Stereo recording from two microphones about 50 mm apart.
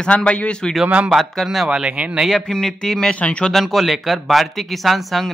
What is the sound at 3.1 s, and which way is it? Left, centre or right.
Speech, left.